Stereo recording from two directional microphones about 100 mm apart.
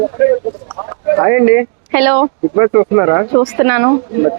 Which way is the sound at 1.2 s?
20° right (ahead or behind).